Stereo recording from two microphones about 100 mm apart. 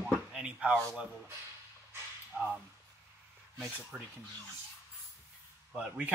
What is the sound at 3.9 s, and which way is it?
Speech, centre (ahead or behind).